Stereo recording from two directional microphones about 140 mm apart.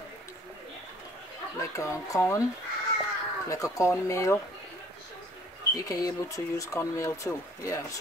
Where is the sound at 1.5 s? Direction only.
20° left (ahead or behind).